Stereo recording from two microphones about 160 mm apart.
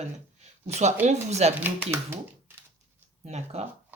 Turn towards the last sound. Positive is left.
turn(degrees=-45)  # may be behind; listen again after turning